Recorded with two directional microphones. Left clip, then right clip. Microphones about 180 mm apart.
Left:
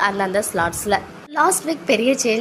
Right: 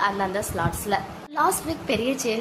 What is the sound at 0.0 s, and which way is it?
A woman's voice, 20° left (ahead or behind).